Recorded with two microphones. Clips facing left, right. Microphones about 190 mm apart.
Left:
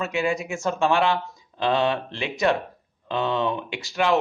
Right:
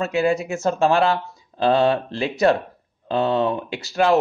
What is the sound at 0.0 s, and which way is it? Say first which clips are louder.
Speech: right 5 dB; 35° right (ahead or behind).